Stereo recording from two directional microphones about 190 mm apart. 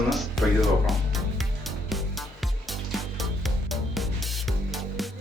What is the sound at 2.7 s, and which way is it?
Music, centre (ahead or behind).